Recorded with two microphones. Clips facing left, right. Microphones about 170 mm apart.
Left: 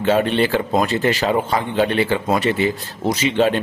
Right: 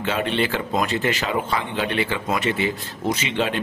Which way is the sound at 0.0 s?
40° left (ahead or behind).